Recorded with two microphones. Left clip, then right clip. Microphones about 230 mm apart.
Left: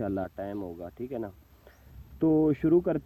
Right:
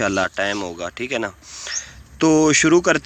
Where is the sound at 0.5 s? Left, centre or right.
Right.